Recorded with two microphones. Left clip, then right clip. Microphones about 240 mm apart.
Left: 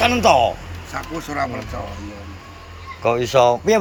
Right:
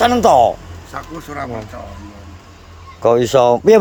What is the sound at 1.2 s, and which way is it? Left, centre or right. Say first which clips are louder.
Speech: left 4 dB; centre.